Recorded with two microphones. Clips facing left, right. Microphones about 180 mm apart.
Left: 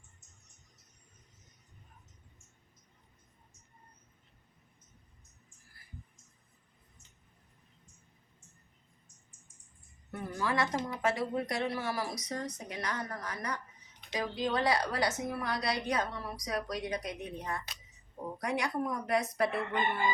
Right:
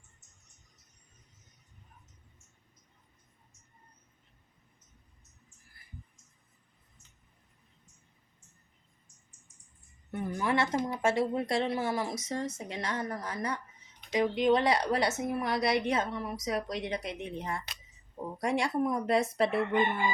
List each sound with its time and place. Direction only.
10.1 s a woman's voice: 20° right (ahead or behind)